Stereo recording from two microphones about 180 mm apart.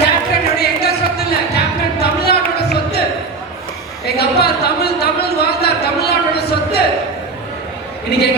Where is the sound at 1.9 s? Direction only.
65° left (ahead or behind).